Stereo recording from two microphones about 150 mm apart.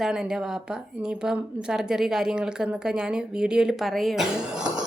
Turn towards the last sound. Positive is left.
turn(degrees=-5)  # may be behind; listen again after turning